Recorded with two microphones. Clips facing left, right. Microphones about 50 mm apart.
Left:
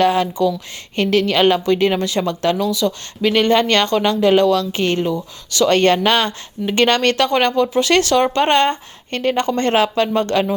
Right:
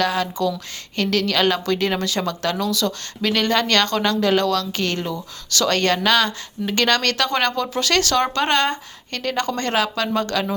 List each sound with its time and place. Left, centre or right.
0.0 s speech: left